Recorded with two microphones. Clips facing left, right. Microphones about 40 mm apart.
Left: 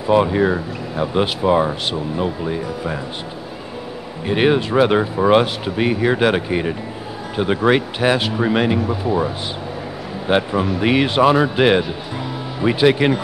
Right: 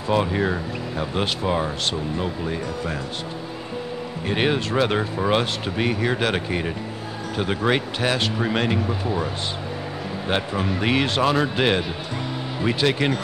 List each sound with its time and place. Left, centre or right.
0.0 s speech: centre
4.3 s speech: centre